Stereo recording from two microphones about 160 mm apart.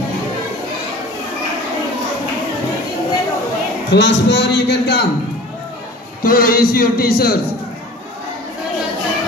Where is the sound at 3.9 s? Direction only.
90° left.